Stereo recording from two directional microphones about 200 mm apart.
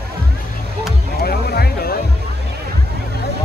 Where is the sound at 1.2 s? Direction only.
50° left (ahead or behind).